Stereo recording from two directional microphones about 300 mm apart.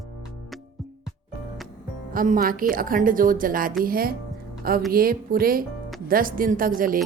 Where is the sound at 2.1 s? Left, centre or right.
Right.